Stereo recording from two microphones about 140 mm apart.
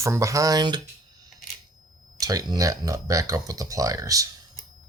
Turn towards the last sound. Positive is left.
turn(degrees=-25)  # may be behind; listen again after turning